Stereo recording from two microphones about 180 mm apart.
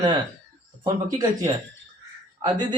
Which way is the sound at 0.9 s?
20° right (ahead or behind).